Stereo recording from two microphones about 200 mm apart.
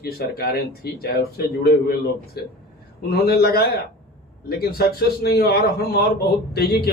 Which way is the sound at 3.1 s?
50° left (ahead or behind).